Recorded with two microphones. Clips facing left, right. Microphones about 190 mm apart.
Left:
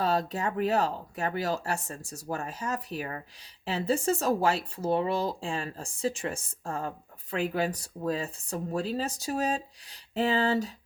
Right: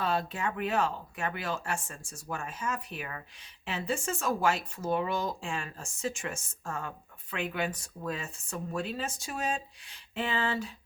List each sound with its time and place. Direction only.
0.0 s speech: 40° left (ahead or behind)